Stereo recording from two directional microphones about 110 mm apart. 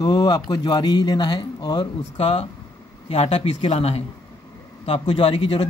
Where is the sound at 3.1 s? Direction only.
70° left (ahead or behind).